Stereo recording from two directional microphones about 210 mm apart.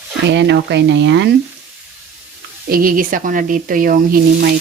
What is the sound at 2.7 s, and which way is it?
Speech, 45° right (ahead or behind).